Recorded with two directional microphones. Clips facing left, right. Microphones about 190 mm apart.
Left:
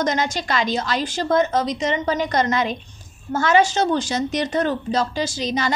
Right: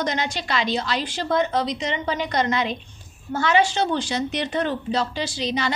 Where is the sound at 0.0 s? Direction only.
45° left (ahead or behind).